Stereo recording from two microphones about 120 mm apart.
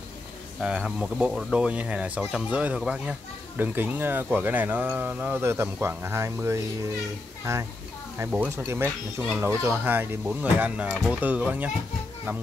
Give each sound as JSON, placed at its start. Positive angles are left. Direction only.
{"t": 0.6, "sound": "speech", "side_deg": -5}